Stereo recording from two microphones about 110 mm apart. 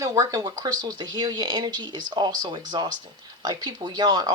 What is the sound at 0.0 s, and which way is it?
Speech, 35° right (ahead or behind).